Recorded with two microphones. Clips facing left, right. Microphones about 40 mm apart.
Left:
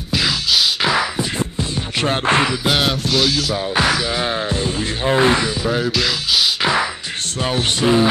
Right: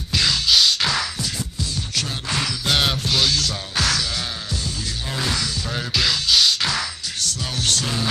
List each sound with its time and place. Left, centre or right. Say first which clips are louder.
0.1 s music: left 1 dB; centre
2.0 s speech: left 15 dB; left
2.8 s music: left 3 dB; centre
3.5 s speech: left 6 dB; left
5.0 s speech: left 11 dB; left
5.9 s beatboxing: left 1 dB; centre
6.6 s music: left 7 dB; left
7.2 s speech: left 5 dB; left